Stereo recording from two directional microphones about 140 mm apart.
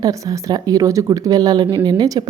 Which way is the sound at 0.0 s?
25° right (ahead or behind).